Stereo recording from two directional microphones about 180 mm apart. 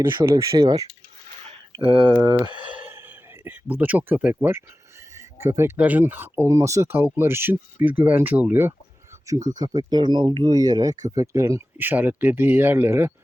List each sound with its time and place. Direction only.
0.3 s speech: 15° right (ahead or behind)
2.6 s a sound: 10° right (ahead or behind)
5.1 s speech: 15° right (ahead or behind)
9.6 s speech: 20° right (ahead or behind)